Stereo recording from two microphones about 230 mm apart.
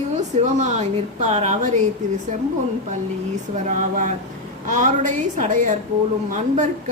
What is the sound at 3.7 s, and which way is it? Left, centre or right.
A woman's voice, right.